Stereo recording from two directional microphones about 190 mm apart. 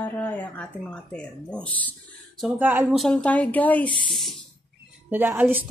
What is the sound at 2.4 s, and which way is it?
Speech, 10° right (ahead or behind).